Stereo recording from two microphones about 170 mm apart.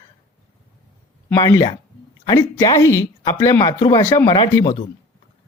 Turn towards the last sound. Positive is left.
turn(degrees=25)  # may be behind; listen again after turning